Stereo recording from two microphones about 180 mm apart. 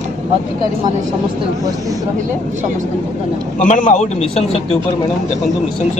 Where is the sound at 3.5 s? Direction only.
45° left (ahead or behind).